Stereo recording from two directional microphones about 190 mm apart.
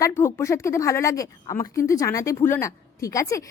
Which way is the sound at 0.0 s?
15° left (ahead or behind).